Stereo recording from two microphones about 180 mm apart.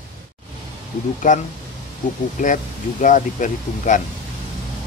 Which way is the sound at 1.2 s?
45° left (ahead or behind).